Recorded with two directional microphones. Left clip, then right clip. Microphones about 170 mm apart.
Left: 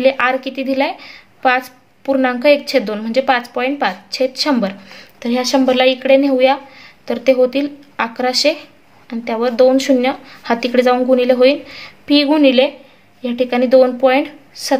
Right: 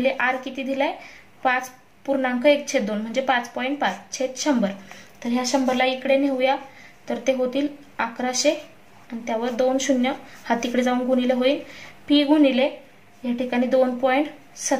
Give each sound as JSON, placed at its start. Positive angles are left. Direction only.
{"t": 0.0, "sound": "speech", "side_deg": 45}
{"t": 2.0, "sound": "speech", "side_deg": 45}